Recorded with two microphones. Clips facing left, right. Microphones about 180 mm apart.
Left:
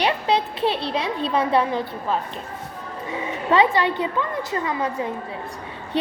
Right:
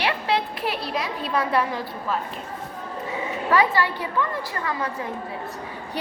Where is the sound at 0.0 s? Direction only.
25° left (ahead or behind).